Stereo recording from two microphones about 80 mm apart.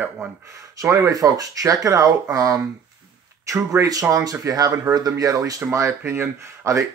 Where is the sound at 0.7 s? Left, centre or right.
Right.